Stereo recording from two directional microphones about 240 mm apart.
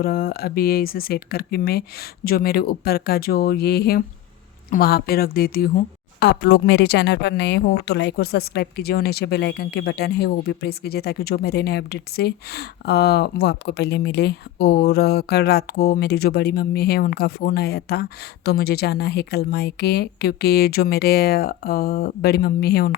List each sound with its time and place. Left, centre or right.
0.0 s a woman's voice: left